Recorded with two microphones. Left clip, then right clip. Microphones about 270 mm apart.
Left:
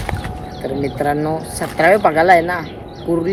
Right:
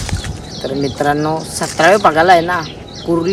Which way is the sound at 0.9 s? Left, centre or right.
Centre.